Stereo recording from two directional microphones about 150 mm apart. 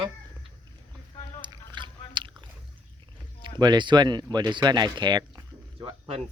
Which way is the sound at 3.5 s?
30° right (ahead or behind).